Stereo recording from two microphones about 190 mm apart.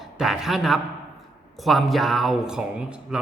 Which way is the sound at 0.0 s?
Centre (ahead or behind).